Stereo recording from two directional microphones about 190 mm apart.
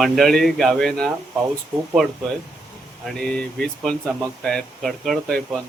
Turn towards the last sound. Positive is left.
turn(degrees=0)  # may be behind; listen again after turning